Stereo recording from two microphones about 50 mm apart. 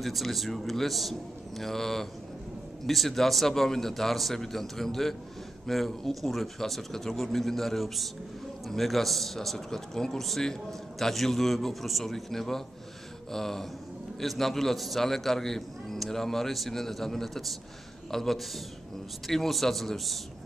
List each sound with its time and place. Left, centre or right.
0.0 s a man's voice: centre